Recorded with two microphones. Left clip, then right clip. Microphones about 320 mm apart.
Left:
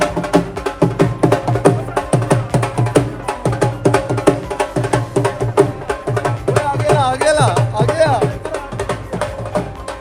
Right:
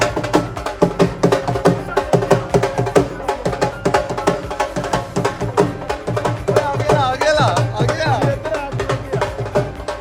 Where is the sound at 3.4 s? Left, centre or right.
Left.